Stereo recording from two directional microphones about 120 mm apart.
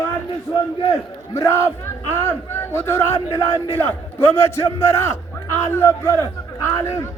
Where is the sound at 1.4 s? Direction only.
25° left (ahead or behind).